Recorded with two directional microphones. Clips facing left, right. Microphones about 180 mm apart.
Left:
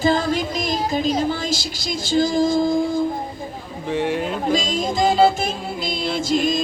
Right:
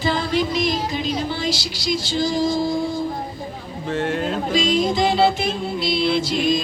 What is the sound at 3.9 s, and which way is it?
Speech, 10° left (ahead or behind).